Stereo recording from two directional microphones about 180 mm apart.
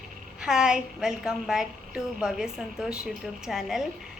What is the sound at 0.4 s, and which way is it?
A woman's voice, 5° right (ahead or behind).